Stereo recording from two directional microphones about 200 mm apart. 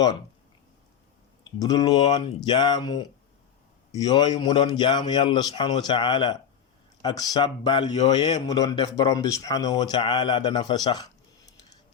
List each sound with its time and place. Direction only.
1.5 s speech: 20° left (ahead or behind)